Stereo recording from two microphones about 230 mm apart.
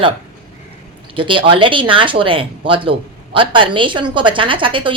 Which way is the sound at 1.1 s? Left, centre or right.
Right.